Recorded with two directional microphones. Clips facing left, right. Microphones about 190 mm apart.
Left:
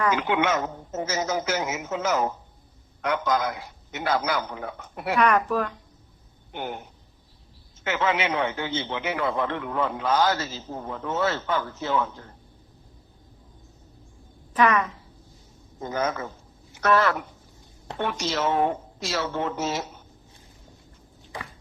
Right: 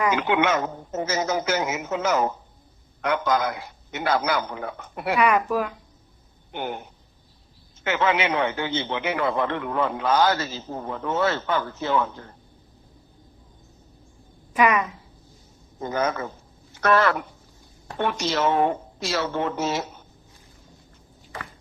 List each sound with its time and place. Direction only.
0.2 s a man's voice: 65° right (ahead or behind)
5.1 s speech: 10° right (ahead or behind)
6.5 s speech: 70° right (ahead or behind)
7.9 s a man's voice: 65° right (ahead or behind)
14.5 s speech: 10° right (ahead or behind)
15.8 s a man's voice: 65° right (ahead or behind)